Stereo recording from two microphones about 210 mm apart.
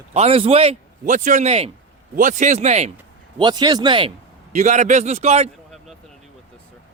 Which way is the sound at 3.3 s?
20° right (ahead or behind).